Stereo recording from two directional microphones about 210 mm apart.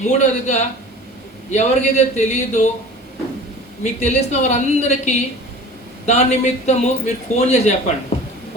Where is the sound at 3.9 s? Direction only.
30° left (ahead or behind).